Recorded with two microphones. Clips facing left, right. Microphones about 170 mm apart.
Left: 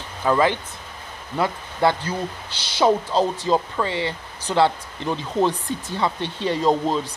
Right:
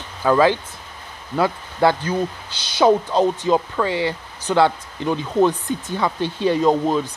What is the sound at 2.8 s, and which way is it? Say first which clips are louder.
Speech: right 3 dB; centre (ahead or behind).